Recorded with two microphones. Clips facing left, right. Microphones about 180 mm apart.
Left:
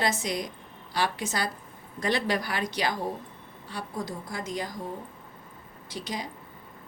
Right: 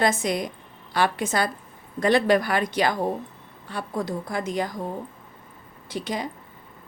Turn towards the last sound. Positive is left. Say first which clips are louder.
# right 6 dB
turn(degrees=-55)  # may be behind; listen again after turning